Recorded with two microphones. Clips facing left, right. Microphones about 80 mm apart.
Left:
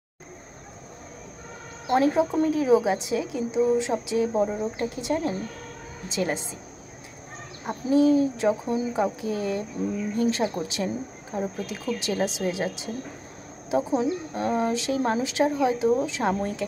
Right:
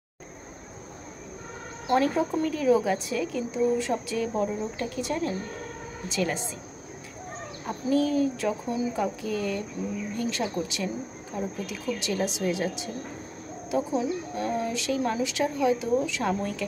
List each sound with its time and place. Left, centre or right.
1.9 s speech: left
7.6 s speech: left